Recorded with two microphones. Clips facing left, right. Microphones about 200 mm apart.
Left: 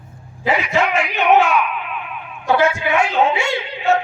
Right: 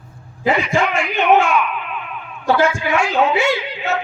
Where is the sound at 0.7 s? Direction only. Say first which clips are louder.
Even; 5° left (ahead or behind).